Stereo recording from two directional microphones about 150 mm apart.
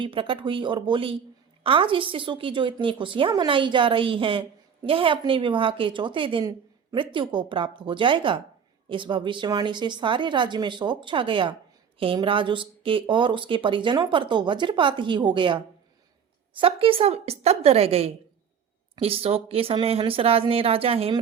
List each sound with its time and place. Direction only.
0.0 s a woman's voice: 35° right (ahead or behind)